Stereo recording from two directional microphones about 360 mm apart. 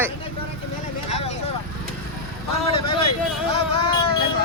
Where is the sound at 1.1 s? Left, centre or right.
Centre.